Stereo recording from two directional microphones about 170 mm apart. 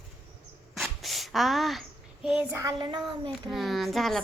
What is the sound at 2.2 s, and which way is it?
Speech, 5° right (ahead or behind).